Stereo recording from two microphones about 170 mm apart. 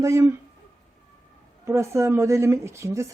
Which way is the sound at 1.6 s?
15° right (ahead or behind).